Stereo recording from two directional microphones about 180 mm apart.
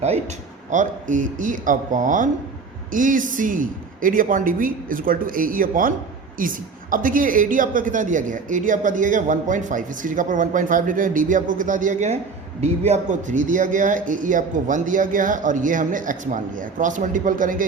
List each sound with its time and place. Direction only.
0.7 s speech: 45° right (ahead or behind)